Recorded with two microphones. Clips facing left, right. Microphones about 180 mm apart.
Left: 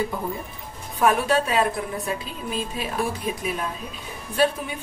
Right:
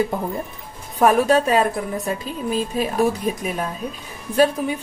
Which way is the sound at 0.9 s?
40° right (ahead or behind).